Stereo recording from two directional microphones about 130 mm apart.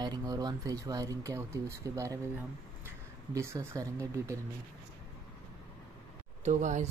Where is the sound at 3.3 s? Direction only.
25° right (ahead or behind).